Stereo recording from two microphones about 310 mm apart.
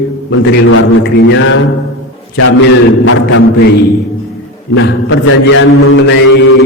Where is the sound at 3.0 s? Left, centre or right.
Left.